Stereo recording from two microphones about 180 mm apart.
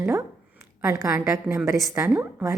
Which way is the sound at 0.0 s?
10° right (ahead or behind).